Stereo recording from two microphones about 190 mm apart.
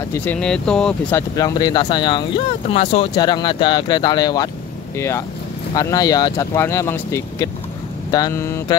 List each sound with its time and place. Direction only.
0.1 s speech: 10° left (ahead or behind)
1.3 s speech: 20° left (ahead or behind)